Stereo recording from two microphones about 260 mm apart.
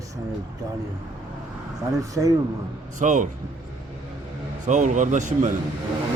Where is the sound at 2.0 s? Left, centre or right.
Centre.